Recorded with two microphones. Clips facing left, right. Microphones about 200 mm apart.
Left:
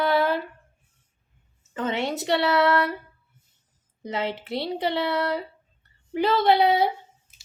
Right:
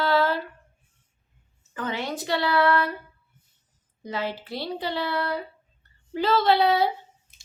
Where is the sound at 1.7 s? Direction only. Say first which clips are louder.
Left 3 dB; 25° left (ahead or behind).